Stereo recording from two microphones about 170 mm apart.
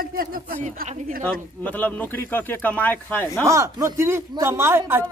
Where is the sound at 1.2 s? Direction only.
10° left (ahead or behind).